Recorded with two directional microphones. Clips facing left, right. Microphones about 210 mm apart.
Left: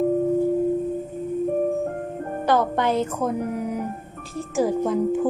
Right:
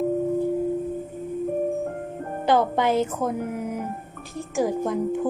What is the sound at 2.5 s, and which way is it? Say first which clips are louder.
A woman's voice: right 1 dB; 10° right (ahead or behind).